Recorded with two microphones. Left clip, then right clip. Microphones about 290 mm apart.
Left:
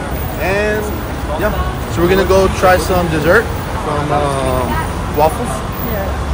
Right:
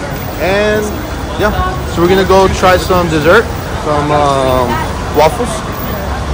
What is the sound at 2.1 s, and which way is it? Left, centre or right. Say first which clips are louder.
Speech: right 3 dB; centre.